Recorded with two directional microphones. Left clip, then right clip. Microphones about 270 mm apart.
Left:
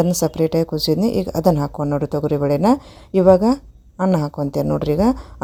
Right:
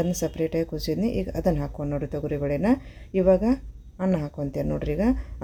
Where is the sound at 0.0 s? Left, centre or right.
Left.